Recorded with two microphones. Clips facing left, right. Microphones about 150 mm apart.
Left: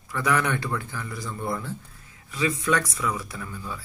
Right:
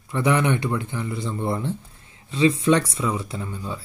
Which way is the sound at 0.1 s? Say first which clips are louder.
Right 4 dB; 25° right (ahead or behind).